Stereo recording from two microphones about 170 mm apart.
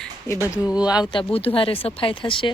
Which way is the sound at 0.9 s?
25° left (ahead or behind).